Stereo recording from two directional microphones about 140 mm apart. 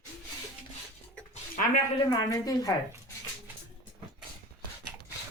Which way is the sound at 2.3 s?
25° left (ahead or behind).